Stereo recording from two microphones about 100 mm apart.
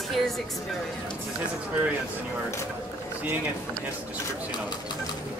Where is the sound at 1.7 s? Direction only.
20° right (ahead or behind).